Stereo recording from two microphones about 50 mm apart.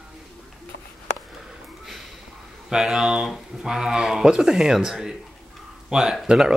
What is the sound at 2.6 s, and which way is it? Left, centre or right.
Speech, centre.